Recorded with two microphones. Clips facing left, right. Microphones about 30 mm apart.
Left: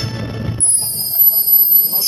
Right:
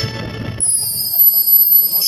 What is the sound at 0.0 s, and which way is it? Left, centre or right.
Music, right.